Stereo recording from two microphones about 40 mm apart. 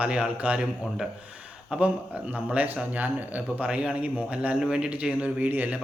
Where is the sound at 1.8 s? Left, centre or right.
Right.